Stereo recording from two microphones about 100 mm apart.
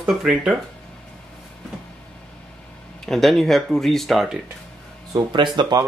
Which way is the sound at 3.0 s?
Centre (ahead or behind).